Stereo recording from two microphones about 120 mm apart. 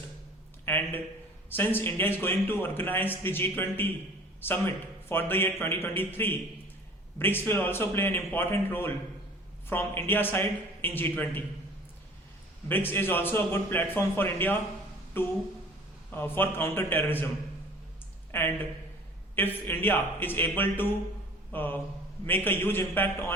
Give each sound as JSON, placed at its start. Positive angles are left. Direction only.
{"t": 0.6, "sound": "a sound", "side_deg": 15}
{"t": 1.5, "sound": "a man's voice", "side_deg": 15}
{"t": 12.6, "sound": "a man's voice", "side_deg": 15}
{"t": 18.3, "sound": "speech", "side_deg": 20}
{"t": 19.6, "sound": "a man's voice", "side_deg": 15}